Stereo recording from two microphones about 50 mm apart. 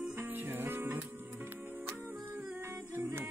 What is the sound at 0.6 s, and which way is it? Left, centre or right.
Music, right.